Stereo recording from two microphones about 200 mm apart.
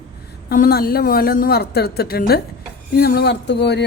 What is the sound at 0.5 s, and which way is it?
A woman's voice, 45° left (ahead or behind).